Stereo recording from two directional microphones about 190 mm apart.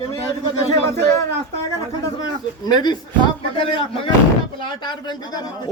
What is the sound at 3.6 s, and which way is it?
A man's voice, 25° left (ahead or behind).